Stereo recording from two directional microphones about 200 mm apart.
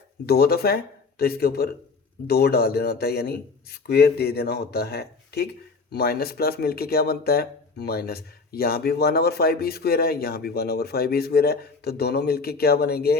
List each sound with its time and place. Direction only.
0.3 s speech: 50° left (ahead or behind)